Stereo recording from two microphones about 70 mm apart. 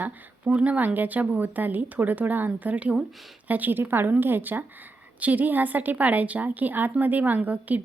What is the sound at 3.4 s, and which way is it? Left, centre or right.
A woman's voice, right.